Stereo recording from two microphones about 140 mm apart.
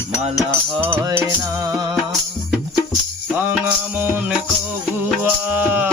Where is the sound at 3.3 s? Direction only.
15° right (ahead or behind).